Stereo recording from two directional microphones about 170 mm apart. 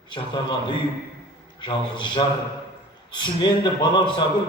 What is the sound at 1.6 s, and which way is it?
A man's voice, 30° left (ahead or behind).